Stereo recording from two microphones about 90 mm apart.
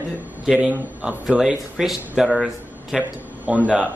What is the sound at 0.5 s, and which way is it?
Speech, 10° right (ahead or behind).